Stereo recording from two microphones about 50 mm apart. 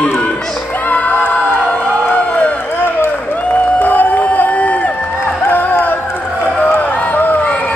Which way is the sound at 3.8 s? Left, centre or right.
Left.